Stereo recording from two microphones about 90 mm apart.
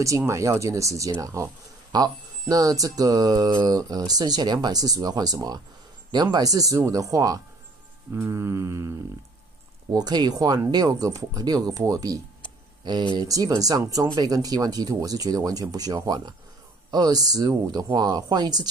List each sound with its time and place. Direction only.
0.2 s speech: 35° right (ahead or behind)
8.1 s speech: 30° right (ahead or behind)
9.8 s speech: 50° right (ahead or behind)